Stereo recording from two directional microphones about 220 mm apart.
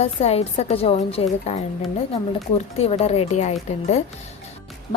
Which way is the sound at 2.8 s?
25° left (ahead or behind).